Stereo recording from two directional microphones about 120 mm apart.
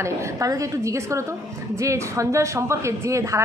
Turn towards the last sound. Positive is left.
turn(degrees=-25)  # may be behind; listen again after turning